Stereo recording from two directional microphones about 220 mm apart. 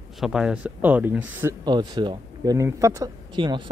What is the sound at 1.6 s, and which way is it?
Speech, 20° right (ahead or behind).